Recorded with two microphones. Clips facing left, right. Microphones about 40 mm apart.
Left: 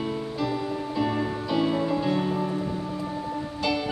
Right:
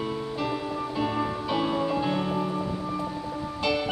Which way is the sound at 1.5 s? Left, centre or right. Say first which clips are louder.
Left 3 dB; centre.